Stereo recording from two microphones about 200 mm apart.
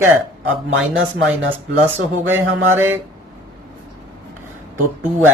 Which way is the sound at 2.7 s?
10° right (ahead or behind).